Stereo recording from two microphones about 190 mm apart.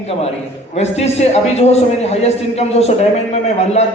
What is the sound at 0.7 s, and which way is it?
A man's voice, 35° left (ahead or behind).